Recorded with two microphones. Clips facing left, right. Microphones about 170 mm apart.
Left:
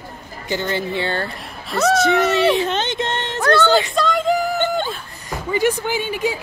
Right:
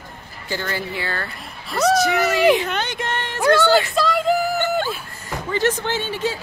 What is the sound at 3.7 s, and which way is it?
Speech, 20° left (ahead or behind).